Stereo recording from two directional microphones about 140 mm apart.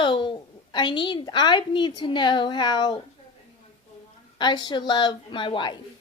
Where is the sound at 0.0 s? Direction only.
35° left (ahead or behind).